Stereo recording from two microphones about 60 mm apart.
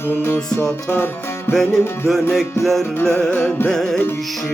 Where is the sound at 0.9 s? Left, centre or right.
Left.